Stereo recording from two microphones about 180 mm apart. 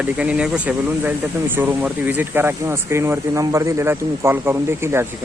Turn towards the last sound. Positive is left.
turn(degrees=-15)  # may be behind; listen again after turning